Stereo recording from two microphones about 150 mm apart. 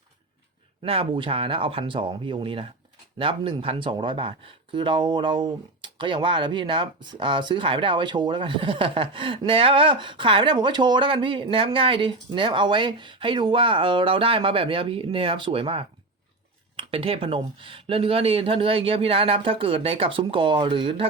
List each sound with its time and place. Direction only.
0.8 s speech: 35° right (ahead or behind)